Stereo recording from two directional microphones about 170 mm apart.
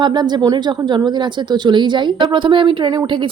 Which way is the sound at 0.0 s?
25° right (ahead or behind).